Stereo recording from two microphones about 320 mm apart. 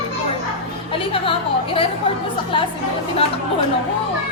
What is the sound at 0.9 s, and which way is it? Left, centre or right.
Music, centre.